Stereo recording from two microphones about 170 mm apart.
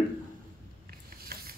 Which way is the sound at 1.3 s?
65° right (ahead or behind).